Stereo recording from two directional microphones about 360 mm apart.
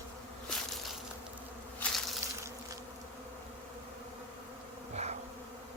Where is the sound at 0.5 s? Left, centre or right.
Centre.